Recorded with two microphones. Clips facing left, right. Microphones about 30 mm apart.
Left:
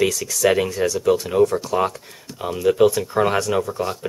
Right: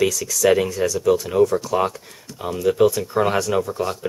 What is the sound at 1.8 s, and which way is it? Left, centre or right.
Speech, centre.